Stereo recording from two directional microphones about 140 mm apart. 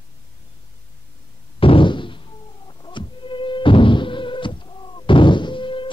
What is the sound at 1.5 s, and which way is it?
Knock, 40° left (ahead or behind).